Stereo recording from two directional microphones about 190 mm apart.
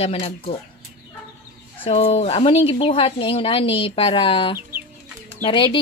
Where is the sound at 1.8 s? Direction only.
35° left (ahead or behind).